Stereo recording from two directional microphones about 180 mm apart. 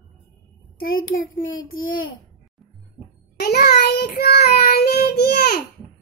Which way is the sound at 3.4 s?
65° left (ahead or behind).